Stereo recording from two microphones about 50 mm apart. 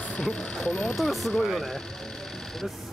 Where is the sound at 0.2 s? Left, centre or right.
Centre.